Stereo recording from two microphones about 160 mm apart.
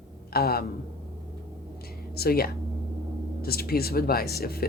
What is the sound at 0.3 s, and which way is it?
Speech, 75° left (ahead or behind).